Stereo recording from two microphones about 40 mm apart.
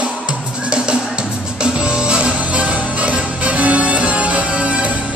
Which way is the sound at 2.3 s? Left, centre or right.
Right.